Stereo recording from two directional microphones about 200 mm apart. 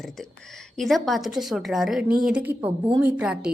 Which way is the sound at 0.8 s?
Centre (ahead or behind).